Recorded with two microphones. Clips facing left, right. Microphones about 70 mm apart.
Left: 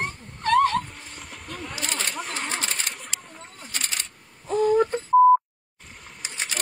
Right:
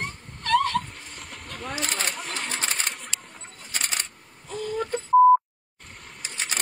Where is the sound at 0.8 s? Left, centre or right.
Centre.